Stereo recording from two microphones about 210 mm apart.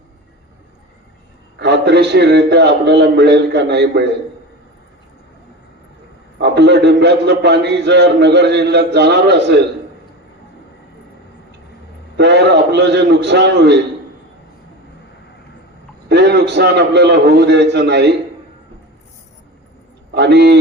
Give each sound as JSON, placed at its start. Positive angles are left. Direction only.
{"t": 1.5, "sound": "a man's voice", "side_deg": -55}
{"t": 6.4, "sound": "a man's voice", "side_deg": -55}
{"t": 12.1, "sound": "a man's voice", "side_deg": -55}
{"t": 16.0, "sound": "a man's voice", "side_deg": -55}
{"t": 20.1, "sound": "a man's voice", "side_deg": -55}